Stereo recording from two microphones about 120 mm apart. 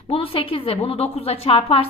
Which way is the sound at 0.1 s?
50° left (ahead or behind).